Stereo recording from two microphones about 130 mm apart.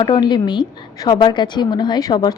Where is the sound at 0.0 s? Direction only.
35° left (ahead or behind).